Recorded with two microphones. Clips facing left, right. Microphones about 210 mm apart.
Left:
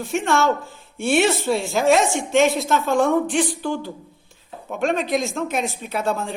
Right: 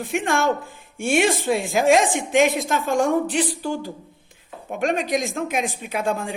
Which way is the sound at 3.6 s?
10° right (ahead or behind).